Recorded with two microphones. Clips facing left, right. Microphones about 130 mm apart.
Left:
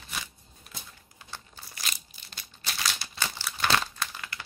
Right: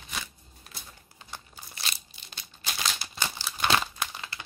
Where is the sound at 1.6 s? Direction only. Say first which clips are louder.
Right 1 dB; 10° right (ahead or behind).